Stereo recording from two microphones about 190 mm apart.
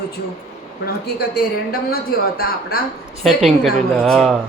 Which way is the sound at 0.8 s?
55° left (ahead or behind).